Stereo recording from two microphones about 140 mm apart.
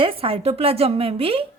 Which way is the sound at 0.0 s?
40° right (ahead or behind).